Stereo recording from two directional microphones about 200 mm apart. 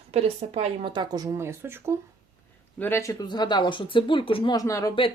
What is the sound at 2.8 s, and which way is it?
Speech, 10° left (ahead or behind).